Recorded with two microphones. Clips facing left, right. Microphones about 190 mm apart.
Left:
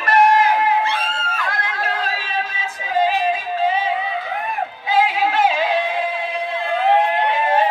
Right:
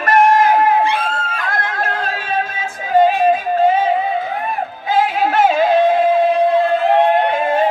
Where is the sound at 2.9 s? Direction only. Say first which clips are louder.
Right 6 dB; 50° right (ahead or behind).